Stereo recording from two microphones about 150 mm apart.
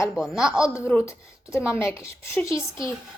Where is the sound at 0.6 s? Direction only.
20° left (ahead or behind).